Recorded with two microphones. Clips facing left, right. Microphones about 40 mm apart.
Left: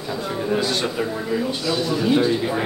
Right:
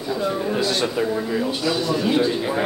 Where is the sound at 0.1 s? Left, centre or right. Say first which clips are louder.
Right 1 dB; centre.